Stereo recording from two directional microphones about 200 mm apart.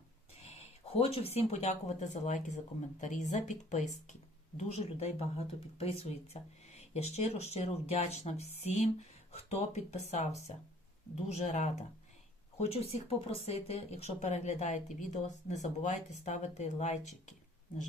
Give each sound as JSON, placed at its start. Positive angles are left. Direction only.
{"t": 0.9, "sound": "speech", "side_deg": 30}